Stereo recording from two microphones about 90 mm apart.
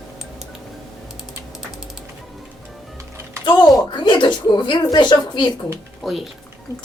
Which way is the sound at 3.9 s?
55° left (ahead or behind).